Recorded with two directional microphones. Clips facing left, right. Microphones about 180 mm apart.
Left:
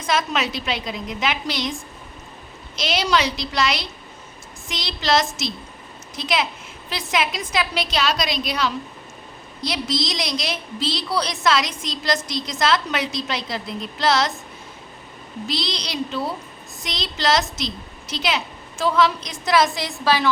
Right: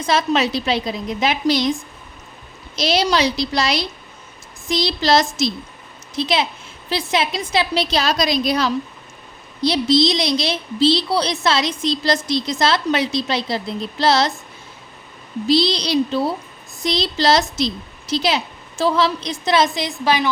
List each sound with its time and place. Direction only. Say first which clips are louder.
0.0 s a woman's voice: right 5 dB; 30° right (ahead or behind)
2.7 s a woman's voice: right 3 dB; 35° right (ahead or behind)
15.4 s a woman's voice: right 11 dB; 35° right (ahead or behind); by 20.3 s 15° right (ahead or behind)